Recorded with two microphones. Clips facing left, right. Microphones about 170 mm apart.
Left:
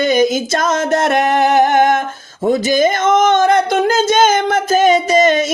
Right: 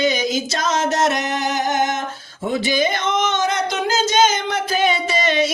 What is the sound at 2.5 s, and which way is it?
Speech, 45° left (ahead or behind).